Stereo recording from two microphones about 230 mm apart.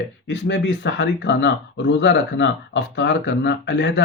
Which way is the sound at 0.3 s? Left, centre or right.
Left.